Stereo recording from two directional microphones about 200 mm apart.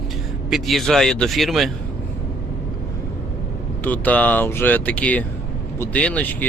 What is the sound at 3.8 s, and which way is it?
Speech, 10° left (ahead or behind).